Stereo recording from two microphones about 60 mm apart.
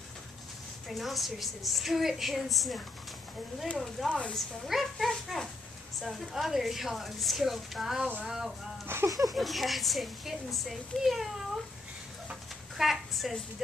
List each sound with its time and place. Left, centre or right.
0.8 s a woman's voice: centre
4.1 s speech: centre
4.6 s a child's voice: centre
8.9 s speech: right
9.3 s a woman's voice: centre
12.7 s a woman's voice: centre